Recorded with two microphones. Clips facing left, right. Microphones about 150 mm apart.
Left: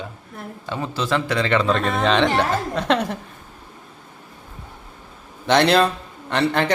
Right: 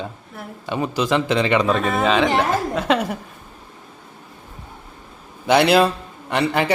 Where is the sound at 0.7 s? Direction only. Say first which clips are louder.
Right 3 dB; 15° right (ahead or behind).